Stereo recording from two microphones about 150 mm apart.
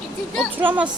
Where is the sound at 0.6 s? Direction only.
10° right (ahead or behind).